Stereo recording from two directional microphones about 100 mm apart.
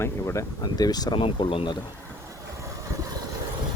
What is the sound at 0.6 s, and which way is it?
Speech, 40° left (ahead or behind).